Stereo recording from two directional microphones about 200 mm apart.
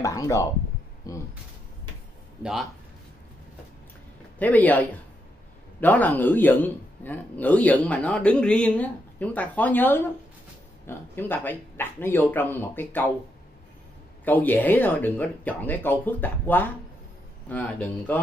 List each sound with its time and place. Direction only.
0.0 s speech: 15° left (ahead or behind)
4.4 s speech: 10° left (ahead or behind)
14.2 s speech: 10° left (ahead or behind)